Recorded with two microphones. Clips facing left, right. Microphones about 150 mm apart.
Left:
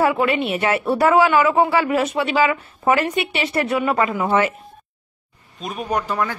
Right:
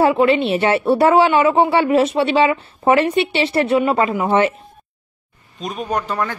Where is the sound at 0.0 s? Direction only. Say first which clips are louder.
Right 4 dB; 25° right (ahead or behind).